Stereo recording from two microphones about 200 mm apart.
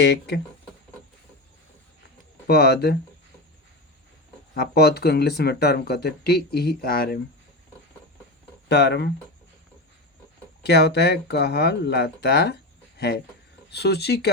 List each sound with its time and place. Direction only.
0.0 s speech: 55° left (ahead or behind)
2.5 s speech: 55° left (ahead or behind)
4.5 s speech: 50° left (ahead or behind)
8.7 s speech: 55° left (ahead or behind)
10.6 s speech: 55° left (ahead or behind)